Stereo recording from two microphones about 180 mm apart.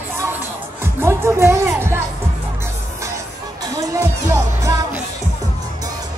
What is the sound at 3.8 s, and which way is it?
Music, 20° right (ahead or behind).